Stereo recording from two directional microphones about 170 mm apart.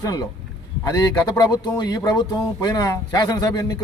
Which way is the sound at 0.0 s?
20° left (ahead or behind).